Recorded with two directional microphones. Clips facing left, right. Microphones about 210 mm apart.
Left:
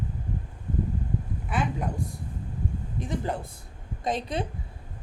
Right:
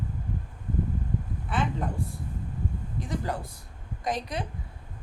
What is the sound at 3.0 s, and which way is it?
Speech, 20° left (ahead or behind).